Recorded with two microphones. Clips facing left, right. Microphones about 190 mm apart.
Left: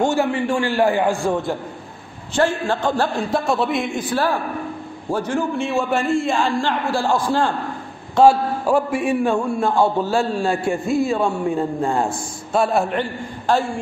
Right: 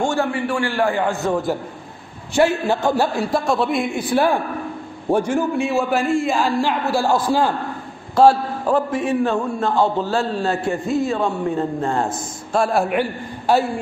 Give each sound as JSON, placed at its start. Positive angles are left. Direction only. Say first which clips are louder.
{"t": 0.0, "sound": "a man's voice", "louder": "left 2 dB", "side_deg": 20}
{"t": 2.3, "sound": "a man's voice", "louder": "right 2 dB", "side_deg": -10}
{"t": 3.3, "sound": "a man's voice", "louder": "right 1 dB", "side_deg": 0}
{"t": 8.7, "sound": "a man's voice", "louder": "even", "side_deg": 10}
{"t": 12.5, "sound": "a man's voice", "louder": "even", "side_deg": 0}